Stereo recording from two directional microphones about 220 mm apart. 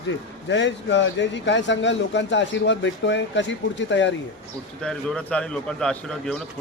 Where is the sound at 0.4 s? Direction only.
55° left (ahead or behind).